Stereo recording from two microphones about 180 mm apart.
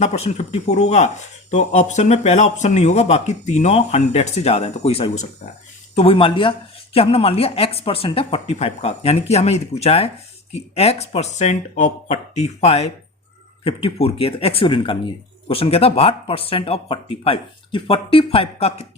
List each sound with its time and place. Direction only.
0.0 s speech: 40° left (ahead or behind)